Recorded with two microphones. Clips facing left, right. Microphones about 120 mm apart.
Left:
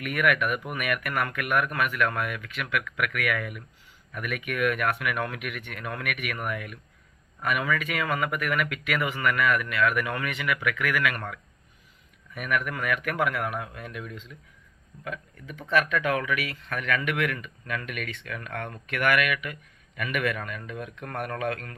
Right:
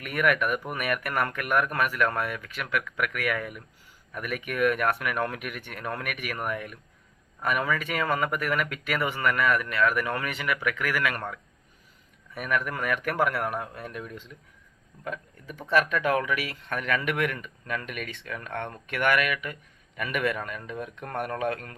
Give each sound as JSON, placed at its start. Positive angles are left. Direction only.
{"t": 0.0, "sound": "speech", "side_deg": -35}
{"t": 12.3, "sound": "speech", "side_deg": -30}